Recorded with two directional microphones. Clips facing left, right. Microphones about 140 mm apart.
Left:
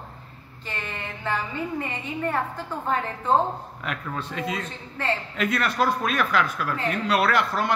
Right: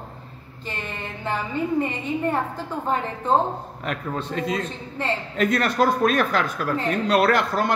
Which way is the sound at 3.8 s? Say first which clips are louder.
Right 4 dB; 40° right (ahead or behind).